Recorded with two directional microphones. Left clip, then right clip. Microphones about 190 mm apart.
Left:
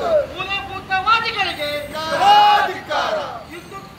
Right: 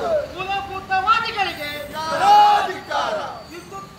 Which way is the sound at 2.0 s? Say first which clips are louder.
Left 1 dB; 35° left (ahead or behind).